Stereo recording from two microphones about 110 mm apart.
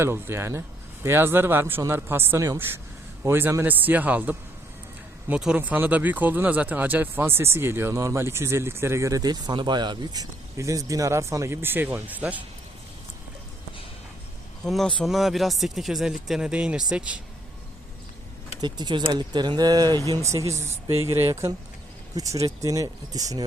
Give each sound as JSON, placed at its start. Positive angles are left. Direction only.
{"t": 0.0, "sound": "a man's voice", "side_deg": -20}
{"t": 14.6, "sound": "speech", "side_deg": 5}
{"t": 18.6, "sound": "speech", "side_deg": -45}